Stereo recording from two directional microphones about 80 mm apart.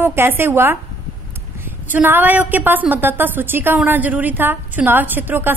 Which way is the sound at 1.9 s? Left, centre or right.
Right.